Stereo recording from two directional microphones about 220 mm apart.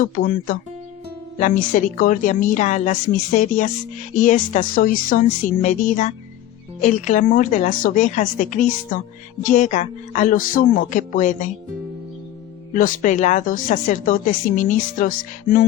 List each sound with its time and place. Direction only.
0.0 s speech: 40° left (ahead or behind)
12.7 s speech: 35° left (ahead or behind)